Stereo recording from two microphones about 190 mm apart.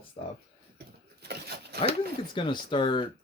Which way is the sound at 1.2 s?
55° right (ahead or behind).